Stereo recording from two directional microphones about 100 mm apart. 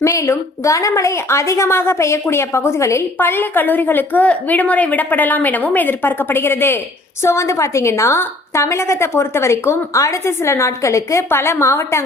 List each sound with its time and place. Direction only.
0.0 s a woman's voice: 30° left (ahead or behind)